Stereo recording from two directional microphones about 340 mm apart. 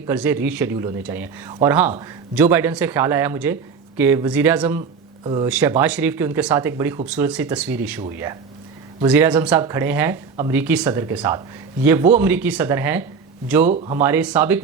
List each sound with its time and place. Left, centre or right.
0.1 s speech: centre
13.7 s speech: centre
13.9 s speech: centre